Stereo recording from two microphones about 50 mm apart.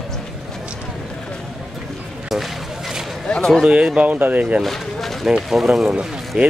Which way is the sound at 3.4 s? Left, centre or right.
Centre.